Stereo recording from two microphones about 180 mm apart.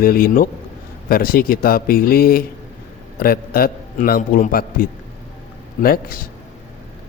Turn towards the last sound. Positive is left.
turn(degrees=50)  # may be behind; listen again after turning